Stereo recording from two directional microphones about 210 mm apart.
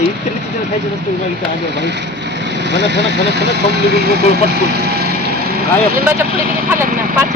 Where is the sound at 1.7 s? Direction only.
55° right (ahead or behind).